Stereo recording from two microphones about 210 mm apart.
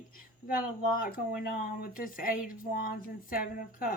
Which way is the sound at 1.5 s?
45° left (ahead or behind).